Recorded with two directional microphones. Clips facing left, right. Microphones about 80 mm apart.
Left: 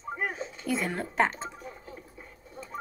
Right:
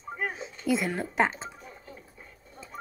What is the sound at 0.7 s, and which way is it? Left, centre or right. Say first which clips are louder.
Speech: right 3 dB; centre.